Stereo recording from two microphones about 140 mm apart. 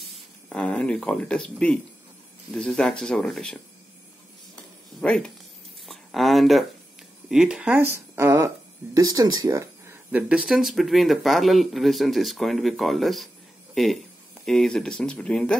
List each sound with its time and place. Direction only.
0.5 s speech: 5° left (ahead or behind)
5.0 s speech: 5° left (ahead or behind)
5.9 s a sound: centre (ahead or behind)
7.2 s speech: 5° right (ahead or behind)
7.7 s speech: 15° right (ahead or behind)
10.1 s speech: 5° right (ahead or behind)
14.4 s speech: 5° left (ahead or behind)